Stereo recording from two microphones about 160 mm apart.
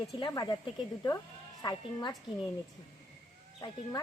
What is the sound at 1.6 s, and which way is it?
Speech, 25° left (ahead or behind).